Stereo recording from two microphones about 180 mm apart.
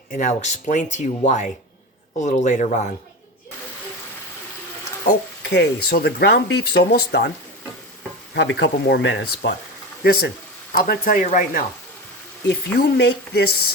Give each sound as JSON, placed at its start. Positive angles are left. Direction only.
{"t": 0.1, "sound": "speech", "side_deg": 45}
{"t": 5.4, "sound": "speech", "side_deg": 65}
{"t": 8.4, "sound": "speech", "side_deg": 75}
{"t": 10.0, "sound": "speech", "side_deg": 60}
{"t": 12.5, "sound": "a woman's voice", "side_deg": 65}